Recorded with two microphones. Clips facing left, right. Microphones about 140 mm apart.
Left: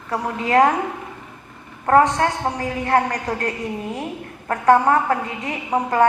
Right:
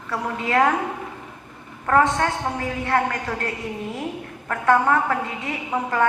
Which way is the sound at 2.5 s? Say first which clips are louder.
Left 3 dB; 40° left (ahead or behind).